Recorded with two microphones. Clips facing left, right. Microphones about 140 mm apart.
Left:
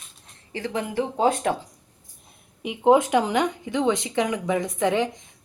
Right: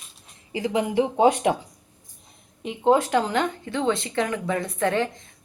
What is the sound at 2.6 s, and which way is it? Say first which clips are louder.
Speech: left 2 dB; 15° left (ahead or behind).